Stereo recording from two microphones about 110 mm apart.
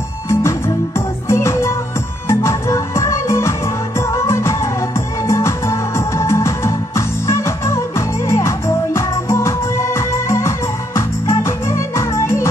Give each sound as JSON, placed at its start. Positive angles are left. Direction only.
{"t": 0.3, "sound": "music", "side_deg": 25}